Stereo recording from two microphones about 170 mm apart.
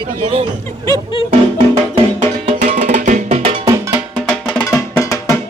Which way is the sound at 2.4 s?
45° right (ahead or behind).